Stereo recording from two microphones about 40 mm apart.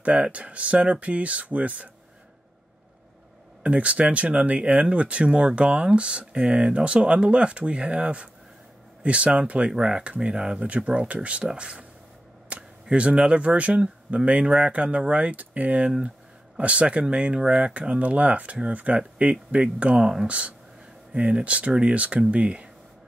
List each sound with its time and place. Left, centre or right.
0.0 s speech: right
3.6 s speech: right
9.7 s speech: centre
10.0 s speech: right
12.5 s a sound: right
12.8 s speech: right